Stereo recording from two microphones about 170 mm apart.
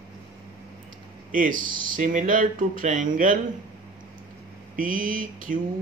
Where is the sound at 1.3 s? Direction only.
50° right (ahead or behind).